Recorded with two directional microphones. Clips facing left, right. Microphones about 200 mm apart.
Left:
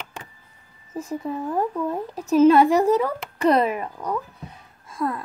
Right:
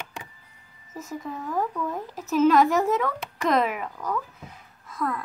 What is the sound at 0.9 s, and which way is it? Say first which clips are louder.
Speech: left 6 dB; 30° left (ahead or behind).